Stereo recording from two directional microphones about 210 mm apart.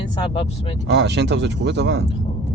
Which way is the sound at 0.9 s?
55° right (ahead or behind).